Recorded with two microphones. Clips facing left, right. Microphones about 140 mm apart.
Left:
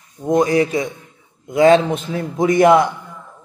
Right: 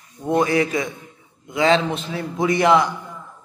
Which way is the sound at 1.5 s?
50° left (ahead or behind).